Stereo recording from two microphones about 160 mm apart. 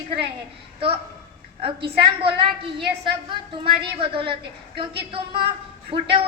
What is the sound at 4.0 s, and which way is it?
A woman's voice, 35° right (ahead or behind).